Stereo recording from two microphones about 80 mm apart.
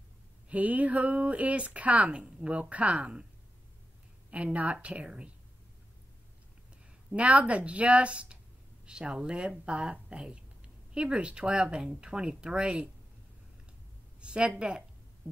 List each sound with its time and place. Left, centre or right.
0.5 s speech: centre
4.3 s speech: centre
7.1 s speech: centre
14.2 s speech: centre